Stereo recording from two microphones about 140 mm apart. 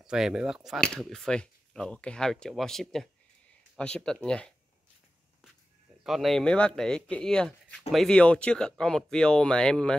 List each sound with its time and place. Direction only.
0.0 s speech: 5° right (ahead or behind)
6.0 s speech: centre (ahead or behind)